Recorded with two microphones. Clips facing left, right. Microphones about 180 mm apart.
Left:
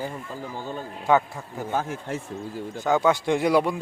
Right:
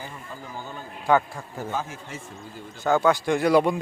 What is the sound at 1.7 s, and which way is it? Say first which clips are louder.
Speech: left 6 dB; 55° left (ahead or behind).